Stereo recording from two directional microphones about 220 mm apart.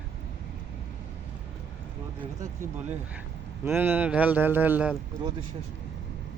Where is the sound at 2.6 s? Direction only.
10° right (ahead or behind).